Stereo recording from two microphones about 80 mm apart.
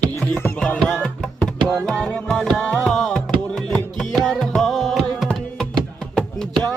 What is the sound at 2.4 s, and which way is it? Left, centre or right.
Music, centre.